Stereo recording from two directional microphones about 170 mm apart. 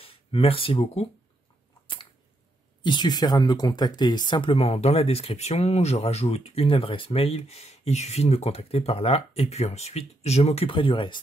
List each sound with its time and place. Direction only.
0.0 s speech: 35° left (ahead or behind)
2.8 s speech: 25° left (ahead or behind)